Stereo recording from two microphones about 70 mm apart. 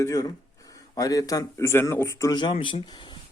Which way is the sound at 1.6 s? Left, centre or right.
Left.